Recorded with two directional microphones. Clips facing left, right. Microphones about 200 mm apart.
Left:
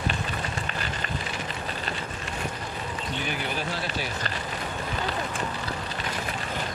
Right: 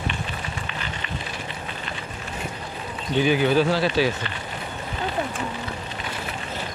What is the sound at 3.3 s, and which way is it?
Speech, 90° right.